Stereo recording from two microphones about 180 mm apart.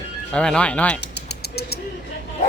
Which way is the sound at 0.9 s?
70° left (ahead or behind).